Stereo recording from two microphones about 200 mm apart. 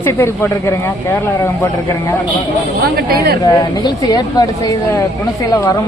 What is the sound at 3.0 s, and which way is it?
Speech, 50° right (ahead or behind).